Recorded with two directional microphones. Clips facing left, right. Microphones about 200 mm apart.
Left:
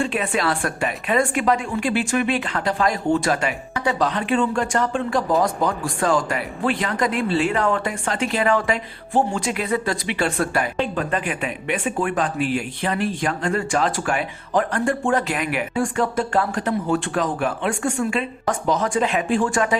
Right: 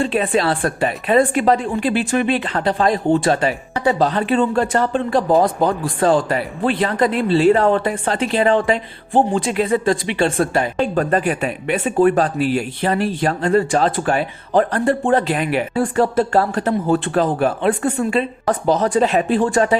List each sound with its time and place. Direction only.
0.0 s speech: 35° right (ahead or behind)
10.8 s speech: 40° right (ahead or behind)